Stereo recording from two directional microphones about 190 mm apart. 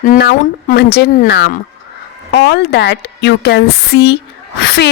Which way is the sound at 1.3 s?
60° left (ahead or behind).